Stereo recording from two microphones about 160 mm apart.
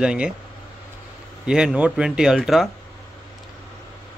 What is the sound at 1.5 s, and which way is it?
Speech, 5° right (ahead or behind).